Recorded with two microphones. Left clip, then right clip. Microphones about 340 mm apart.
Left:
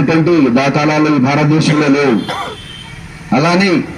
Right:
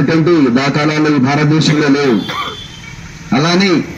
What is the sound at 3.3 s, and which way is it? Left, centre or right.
Speech, left.